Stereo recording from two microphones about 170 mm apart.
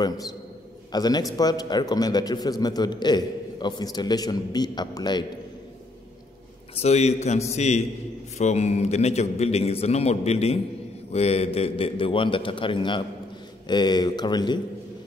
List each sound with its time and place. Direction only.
0.9 s a man's voice: 25° left (ahead or behind)
6.7 s a man's voice: 40° left (ahead or behind)